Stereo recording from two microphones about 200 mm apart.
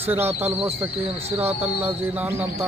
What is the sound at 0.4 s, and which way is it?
Speech, 10° right (ahead or behind).